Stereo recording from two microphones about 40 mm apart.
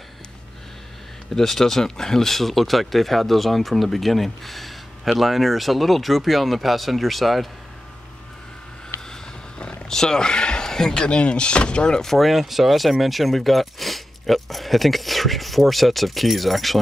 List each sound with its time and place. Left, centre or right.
1.3 s speech: centre
9.1 s a sound: left
9.8 s speech: centre
12.0 s speech: centre
12.3 s speech: centre